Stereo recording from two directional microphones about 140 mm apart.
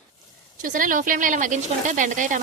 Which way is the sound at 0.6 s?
70° right (ahead or behind).